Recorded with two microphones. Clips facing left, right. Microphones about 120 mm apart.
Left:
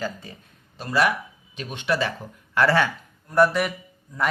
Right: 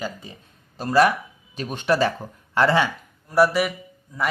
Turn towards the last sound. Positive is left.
turn(degrees=0)  # may be behind; listen again after turning